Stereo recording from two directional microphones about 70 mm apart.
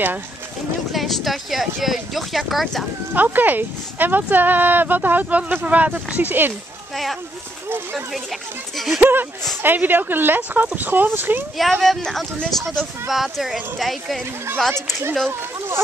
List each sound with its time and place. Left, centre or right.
0.9 s speech: centre
3.2 s speech: right
8.7 s speech: centre
9.0 s speech: right
11.5 s speech: centre